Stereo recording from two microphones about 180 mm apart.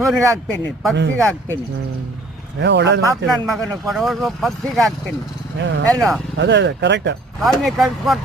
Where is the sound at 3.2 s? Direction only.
Centre (ahead or behind).